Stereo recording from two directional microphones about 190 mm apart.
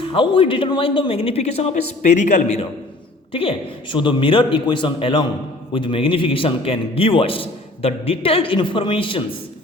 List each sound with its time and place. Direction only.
0.0 s speech: 25° left (ahead or behind)
3.3 s a man's voice: 25° left (ahead or behind)